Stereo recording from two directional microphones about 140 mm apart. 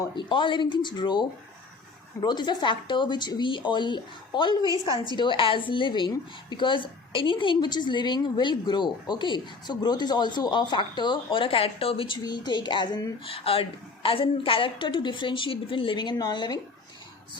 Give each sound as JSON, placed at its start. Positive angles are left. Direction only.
{"t": 0.2, "sound": "a woman's voice", "side_deg": 35}
{"t": 13.3, "sound": "a woman's voice", "side_deg": 45}